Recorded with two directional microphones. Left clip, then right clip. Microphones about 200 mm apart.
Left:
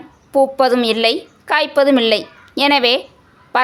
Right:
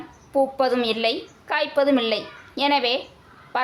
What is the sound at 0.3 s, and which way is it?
A woman's voice, 40° left (ahead or behind).